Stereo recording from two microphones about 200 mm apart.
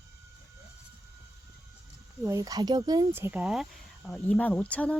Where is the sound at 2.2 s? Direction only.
15° right (ahead or behind).